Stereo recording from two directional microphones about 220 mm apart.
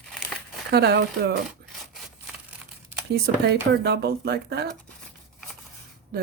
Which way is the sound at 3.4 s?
50° right (ahead or behind).